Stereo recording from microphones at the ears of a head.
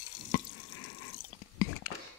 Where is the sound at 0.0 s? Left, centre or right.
Left.